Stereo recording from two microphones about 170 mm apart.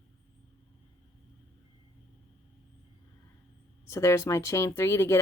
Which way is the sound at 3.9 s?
15° left (ahead or behind).